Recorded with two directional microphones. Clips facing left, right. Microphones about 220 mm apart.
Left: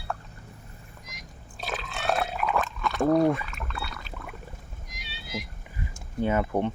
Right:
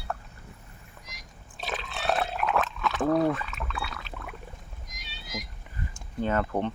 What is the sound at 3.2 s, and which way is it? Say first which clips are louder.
Speech: left 3 dB; 10° left (ahead or behind).